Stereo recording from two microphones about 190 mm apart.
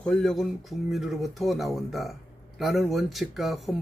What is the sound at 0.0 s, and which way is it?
Speech, 5° left (ahead or behind).